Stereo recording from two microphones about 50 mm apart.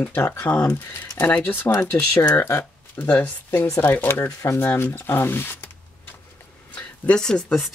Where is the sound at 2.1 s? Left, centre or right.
Left.